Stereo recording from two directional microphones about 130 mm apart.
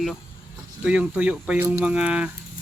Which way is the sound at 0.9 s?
10° right (ahead or behind).